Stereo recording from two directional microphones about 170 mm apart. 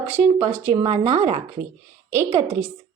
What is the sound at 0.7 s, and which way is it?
Speech, 30° right (ahead or behind).